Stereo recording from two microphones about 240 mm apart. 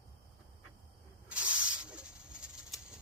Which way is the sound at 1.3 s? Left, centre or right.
Centre.